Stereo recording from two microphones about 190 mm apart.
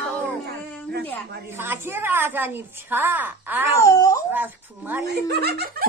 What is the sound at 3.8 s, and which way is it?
Speech, 15° left (ahead or behind).